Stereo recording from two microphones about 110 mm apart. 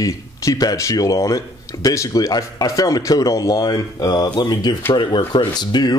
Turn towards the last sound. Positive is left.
turn(degrees=40)  # may be behind; listen again after turning